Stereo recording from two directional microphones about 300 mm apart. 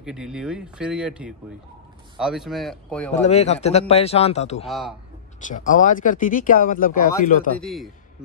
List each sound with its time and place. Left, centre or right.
0.0 s speech: centre
3.1 s speech: left
4.6 s speech: centre
5.5 s speech: left
7.6 s speech: centre